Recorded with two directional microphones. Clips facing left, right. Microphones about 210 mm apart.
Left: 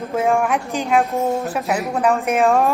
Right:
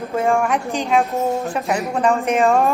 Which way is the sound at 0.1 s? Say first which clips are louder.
Even; centre (ahead or behind).